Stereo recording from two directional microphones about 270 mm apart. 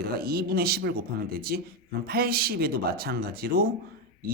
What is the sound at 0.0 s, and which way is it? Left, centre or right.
Speech, right.